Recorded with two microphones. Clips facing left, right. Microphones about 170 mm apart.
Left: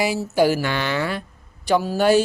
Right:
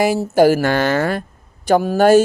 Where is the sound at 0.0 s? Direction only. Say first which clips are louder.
Right 6 dB; 50° right (ahead or behind).